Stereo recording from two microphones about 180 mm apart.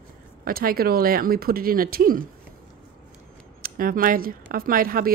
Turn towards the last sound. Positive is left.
turn(degrees=-55)  # may be behind; listen again after turning